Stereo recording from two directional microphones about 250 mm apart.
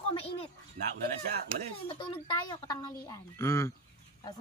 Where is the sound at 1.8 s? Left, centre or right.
Left.